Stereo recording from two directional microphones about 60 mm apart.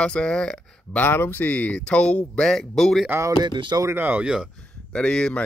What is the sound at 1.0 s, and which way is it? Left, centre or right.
Speech, left.